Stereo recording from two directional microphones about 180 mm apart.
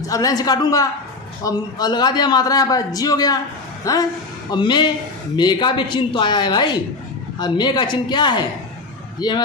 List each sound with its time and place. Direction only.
0.0 s a man's voice: 20° left (ahead or behind)